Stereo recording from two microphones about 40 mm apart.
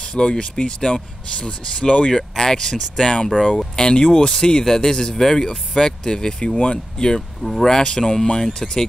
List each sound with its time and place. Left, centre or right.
0.0 s speech: left
1.9 s speech: left
2.1 s speech: centre
7.4 s speech: centre
7.7 s speech: centre